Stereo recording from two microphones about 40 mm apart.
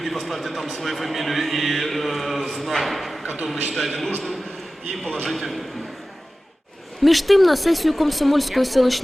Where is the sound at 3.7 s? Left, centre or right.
Centre.